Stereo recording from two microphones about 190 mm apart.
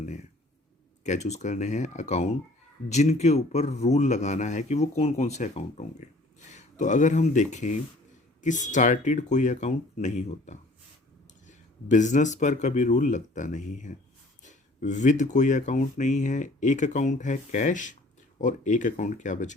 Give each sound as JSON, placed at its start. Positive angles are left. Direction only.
{"t": 1.0, "sound": "speech", "side_deg": 35}